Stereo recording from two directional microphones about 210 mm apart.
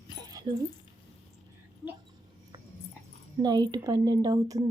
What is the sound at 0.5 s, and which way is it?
Speech, 30° right (ahead or behind).